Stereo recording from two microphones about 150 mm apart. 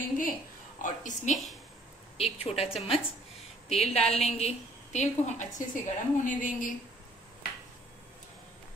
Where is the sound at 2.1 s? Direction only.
45° left (ahead or behind); by 6.8 s 60° left (ahead or behind).